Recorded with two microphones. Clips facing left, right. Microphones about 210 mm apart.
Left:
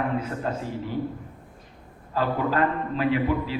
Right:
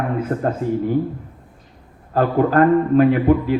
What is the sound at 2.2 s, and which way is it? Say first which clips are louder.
A man's voice: right 8 dB; 50° right (ahead or behind).